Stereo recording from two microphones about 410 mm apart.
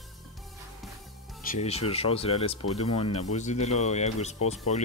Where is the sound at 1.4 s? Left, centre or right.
Centre.